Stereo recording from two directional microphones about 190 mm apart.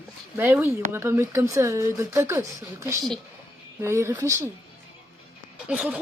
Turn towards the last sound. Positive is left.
turn(degrees=-5)  # may be behind; listen again after turning